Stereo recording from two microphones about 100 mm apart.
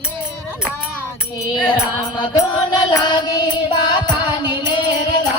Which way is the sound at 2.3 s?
45° left (ahead or behind).